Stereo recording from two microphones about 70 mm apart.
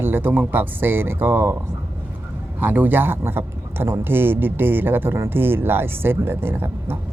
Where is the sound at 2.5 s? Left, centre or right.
Right.